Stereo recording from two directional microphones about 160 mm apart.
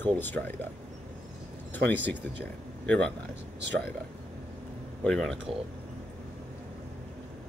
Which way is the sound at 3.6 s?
90° right.